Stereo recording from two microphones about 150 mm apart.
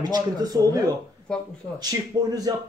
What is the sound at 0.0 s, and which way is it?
Speech, 25° right (ahead or behind).